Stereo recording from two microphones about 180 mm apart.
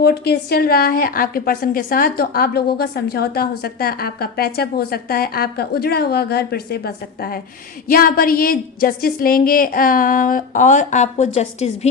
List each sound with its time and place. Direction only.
0.0 s a woman's voice: 60° left (ahead or behind); by 11.9 s 35° left (ahead or behind)